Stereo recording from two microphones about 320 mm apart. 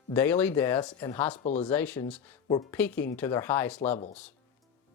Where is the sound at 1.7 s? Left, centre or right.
Centre.